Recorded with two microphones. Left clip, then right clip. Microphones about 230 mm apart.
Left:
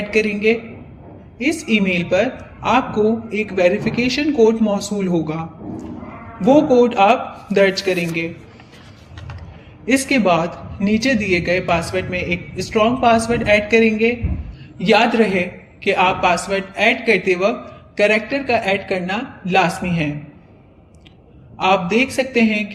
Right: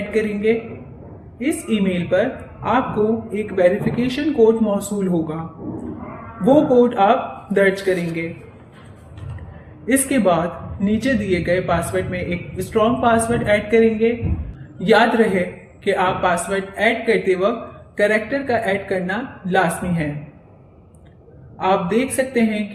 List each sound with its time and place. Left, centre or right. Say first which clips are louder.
0.1 s a man's voice: left 2 dB; left
9.8 s a man's voice: left 1 dB; left
14.8 s a man's voice: even; left
21.6 s a man's voice: left 2 dB; left